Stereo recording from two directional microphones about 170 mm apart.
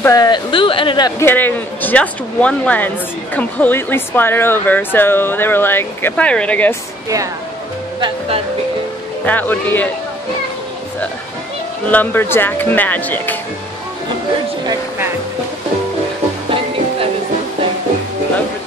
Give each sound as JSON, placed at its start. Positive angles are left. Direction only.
{"t": 0.0, "sound": "speech", "side_deg": 20}
{"t": 1.2, "sound": "speech", "side_deg": 10}
{"t": 9.2, "sound": "speech", "side_deg": 10}
{"t": 11.9, "sound": "speech", "side_deg": 10}